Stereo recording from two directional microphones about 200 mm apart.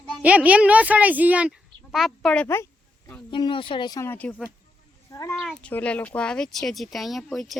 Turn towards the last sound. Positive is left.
turn(degrees=0)  # may be behind; listen again after turning